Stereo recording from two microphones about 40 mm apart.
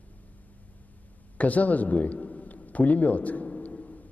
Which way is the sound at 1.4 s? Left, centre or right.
Left.